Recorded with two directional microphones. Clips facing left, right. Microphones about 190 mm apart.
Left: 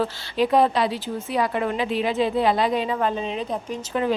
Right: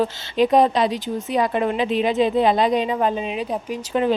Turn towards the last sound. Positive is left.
turn(degrees=-25)  # may be behind; listen again after turning